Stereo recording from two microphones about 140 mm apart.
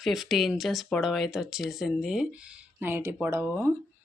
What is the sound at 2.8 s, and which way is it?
Speech, 15° right (ahead or behind).